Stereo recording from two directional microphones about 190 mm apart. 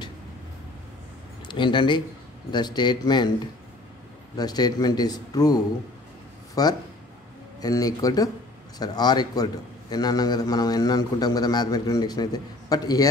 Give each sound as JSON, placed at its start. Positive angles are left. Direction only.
{"t": 1.5, "sound": "a man's voice", "side_deg": 25}
{"t": 4.4, "sound": "a man's voice", "side_deg": 20}